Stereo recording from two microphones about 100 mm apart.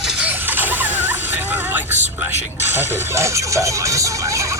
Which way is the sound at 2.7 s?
25° right (ahead or behind).